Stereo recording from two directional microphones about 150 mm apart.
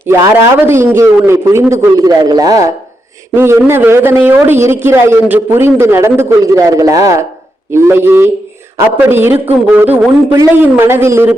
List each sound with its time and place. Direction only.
0.1 s a man's voice: 15° right (ahead or behind)